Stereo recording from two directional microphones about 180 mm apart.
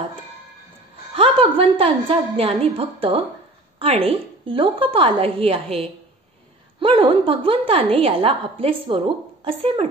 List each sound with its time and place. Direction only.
1.1 s a woman's voice: 30° right (ahead or behind)